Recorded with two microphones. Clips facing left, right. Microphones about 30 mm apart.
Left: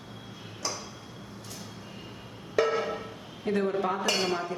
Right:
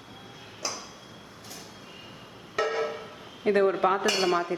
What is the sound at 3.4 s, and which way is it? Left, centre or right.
Speech, right.